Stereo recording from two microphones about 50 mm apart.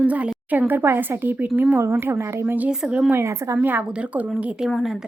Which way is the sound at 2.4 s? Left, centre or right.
Right.